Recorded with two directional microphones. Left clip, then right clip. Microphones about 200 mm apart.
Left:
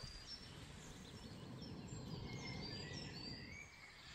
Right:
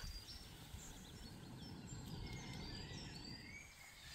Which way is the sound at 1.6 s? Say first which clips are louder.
Left 1 dB; 15° right (ahead or behind).